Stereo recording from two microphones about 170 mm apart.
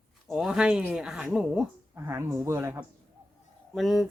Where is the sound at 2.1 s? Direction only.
15° right (ahead or behind).